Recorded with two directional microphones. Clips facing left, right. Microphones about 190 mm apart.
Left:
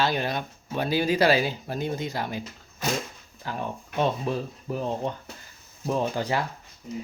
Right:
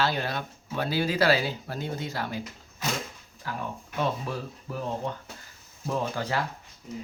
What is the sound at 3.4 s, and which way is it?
Speech, 20° left (ahead or behind).